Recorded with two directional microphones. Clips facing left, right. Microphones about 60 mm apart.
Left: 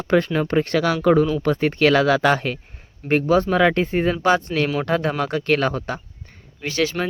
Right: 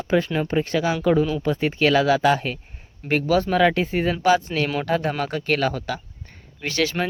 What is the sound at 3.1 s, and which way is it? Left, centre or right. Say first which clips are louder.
Speech: left 2 dB; left.